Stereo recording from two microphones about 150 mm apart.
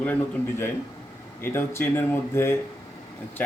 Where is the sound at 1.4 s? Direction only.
15° left (ahead or behind).